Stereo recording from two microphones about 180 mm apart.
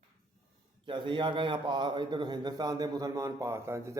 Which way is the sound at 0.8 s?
25° right (ahead or behind).